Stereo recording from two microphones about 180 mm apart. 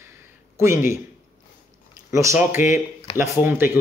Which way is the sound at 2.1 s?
15° right (ahead or behind).